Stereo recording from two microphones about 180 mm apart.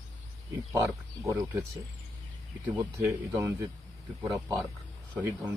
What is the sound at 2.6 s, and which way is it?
Speech, 15° right (ahead or behind).